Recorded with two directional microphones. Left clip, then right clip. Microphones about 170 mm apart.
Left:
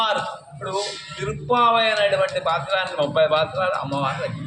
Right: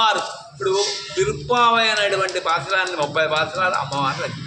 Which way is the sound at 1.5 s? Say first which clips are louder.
Even; 15° right (ahead or behind).